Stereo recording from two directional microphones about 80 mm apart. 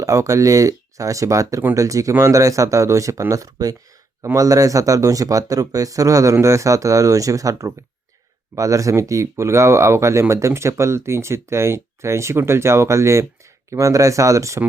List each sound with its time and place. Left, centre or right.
0.0 s speech: right